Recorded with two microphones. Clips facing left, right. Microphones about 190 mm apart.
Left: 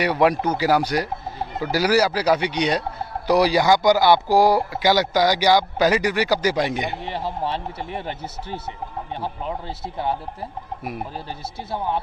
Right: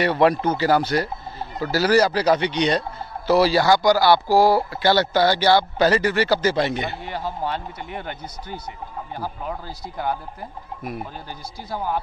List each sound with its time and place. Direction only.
0.0 s speech: 10° left (ahead or behind)
7.1 s speech: 30° left (ahead or behind)
11.7 s speech: 25° left (ahead or behind)